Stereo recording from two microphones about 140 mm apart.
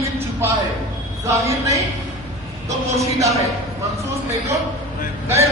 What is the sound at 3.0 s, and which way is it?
Speech, 25° right (ahead or behind).